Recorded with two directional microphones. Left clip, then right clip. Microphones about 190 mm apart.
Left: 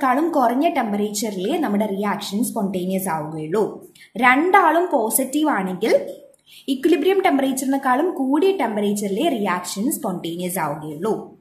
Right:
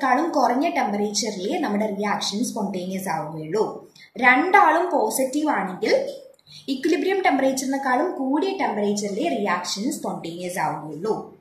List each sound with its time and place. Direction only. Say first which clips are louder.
0.0 s a woman's voice: left 2 dB; 40° left (ahead or behind)